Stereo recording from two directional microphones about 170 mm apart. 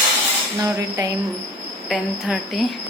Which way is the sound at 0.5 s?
20° right (ahead or behind).